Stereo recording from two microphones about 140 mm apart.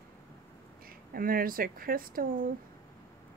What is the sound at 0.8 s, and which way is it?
Speech, 90° right.